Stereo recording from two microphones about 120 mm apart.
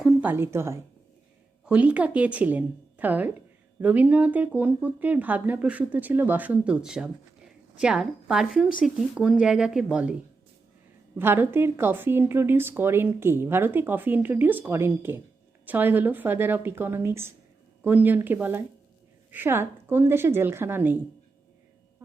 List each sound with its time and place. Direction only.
0.2 s speech: 15° right (ahead or behind)
1.6 s speech: 10° right (ahead or behind)
11.2 s speech: 20° right (ahead or behind)